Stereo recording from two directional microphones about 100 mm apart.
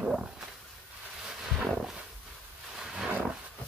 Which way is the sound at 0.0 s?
5° right (ahead or behind).